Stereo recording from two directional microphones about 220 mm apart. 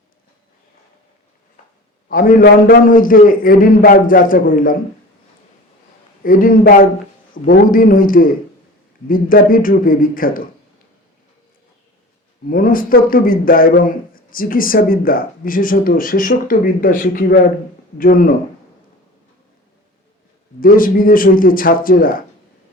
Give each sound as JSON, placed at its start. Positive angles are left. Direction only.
{"t": 2.0, "sound": "speech", "side_deg": 40}
{"t": 6.2, "sound": "speech", "side_deg": 40}
{"t": 12.5, "sound": "speech", "side_deg": 40}
{"t": 20.6, "sound": "speech", "side_deg": 40}